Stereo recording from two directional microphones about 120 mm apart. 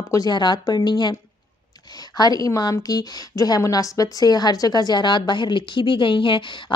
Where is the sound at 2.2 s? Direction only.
30° left (ahead or behind).